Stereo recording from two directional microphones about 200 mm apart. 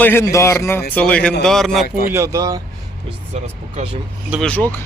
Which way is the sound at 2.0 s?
15° right (ahead or behind).